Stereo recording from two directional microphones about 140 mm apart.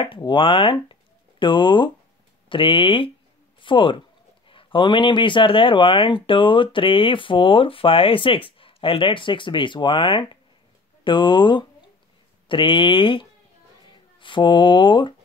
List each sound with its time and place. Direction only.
0.2 s speech: 35° left (ahead or behind)